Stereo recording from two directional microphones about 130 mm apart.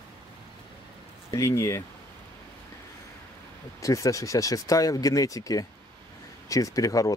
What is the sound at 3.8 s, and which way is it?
Speech, 25° left (ahead or behind).